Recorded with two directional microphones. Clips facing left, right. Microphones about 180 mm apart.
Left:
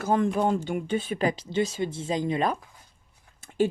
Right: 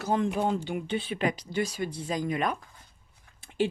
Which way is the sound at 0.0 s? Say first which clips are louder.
Left 3 dB; 50° left (ahead or behind).